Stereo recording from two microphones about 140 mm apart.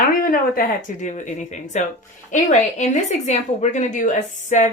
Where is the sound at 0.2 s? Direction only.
90° left.